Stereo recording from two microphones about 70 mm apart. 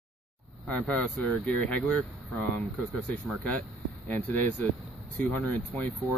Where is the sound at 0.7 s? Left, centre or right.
Left.